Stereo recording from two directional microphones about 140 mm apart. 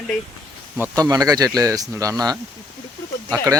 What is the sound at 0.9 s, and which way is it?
A man's voice, 25° right (ahead or behind).